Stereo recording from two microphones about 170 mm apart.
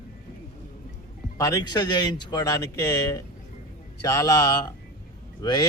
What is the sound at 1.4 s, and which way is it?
A man's voice, 20° left (ahead or behind).